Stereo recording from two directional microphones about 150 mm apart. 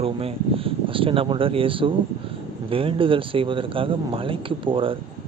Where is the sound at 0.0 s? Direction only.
40° right (ahead or behind).